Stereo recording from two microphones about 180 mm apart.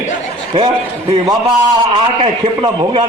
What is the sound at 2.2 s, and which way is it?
Speech, 30° right (ahead or behind).